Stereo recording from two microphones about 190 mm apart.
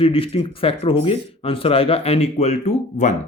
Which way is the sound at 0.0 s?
30° left (ahead or behind).